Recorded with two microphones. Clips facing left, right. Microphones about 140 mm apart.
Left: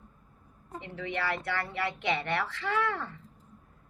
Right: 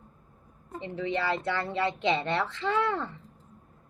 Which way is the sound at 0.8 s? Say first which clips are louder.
Right 4 dB; 20° right (ahead or behind).